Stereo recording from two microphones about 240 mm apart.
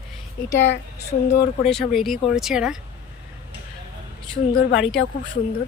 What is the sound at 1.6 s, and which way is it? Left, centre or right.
Speech, centre.